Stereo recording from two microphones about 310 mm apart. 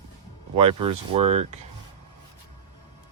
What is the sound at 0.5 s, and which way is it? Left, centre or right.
Speech, centre.